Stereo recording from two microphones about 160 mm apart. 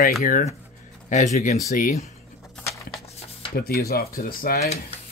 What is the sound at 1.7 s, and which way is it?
Speech, 55° left (ahead or behind).